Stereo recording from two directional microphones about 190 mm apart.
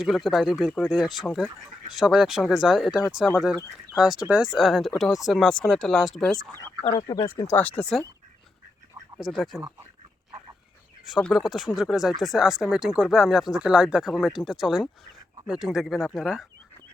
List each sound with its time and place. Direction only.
0.0 s speech: centre (ahead or behind)
6.9 s speech: 20° left (ahead or behind)
9.1 s speech: centre (ahead or behind)
11.1 s speech: centre (ahead or behind)